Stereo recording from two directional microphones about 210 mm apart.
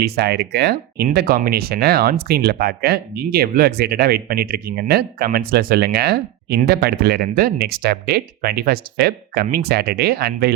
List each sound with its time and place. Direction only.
0.0 s speech: 50° right (ahead or behind)